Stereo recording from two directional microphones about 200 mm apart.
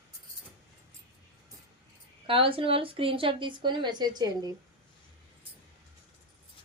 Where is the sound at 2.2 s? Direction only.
25° right (ahead or behind).